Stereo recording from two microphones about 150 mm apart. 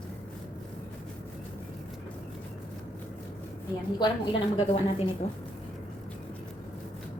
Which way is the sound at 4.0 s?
35° left (ahead or behind).